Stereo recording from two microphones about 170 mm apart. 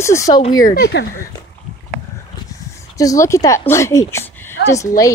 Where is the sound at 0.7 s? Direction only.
90° left.